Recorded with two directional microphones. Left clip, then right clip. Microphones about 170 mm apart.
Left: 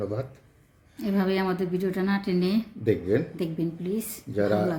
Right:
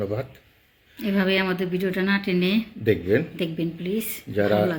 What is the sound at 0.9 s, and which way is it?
Speech, 30° left (ahead or behind).